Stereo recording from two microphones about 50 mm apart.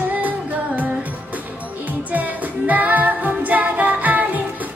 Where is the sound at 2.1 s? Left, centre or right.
Right.